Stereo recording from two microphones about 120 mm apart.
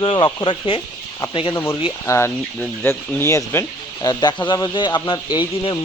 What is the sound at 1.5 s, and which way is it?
Speech, 20° left (ahead or behind).